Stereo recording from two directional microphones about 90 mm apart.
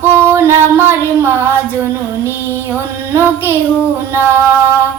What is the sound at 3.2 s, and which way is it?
Child singing, 25° right (ahead or behind).